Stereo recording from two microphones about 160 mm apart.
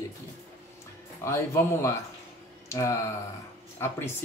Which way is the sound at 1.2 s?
15° left (ahead or behind).